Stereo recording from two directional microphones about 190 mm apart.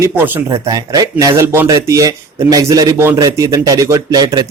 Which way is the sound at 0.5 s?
20° right (ahead or behind).